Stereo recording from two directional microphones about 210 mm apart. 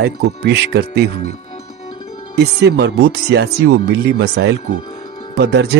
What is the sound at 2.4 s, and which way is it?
Speech, 50° right (ahead or behind).